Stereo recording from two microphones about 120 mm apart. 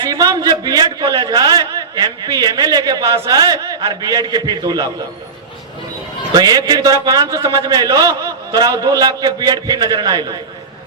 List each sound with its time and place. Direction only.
0.0 s a man's voice: 30° right (ahead or behind)
6.3 s a man's voice: 35° right (ahead or behind)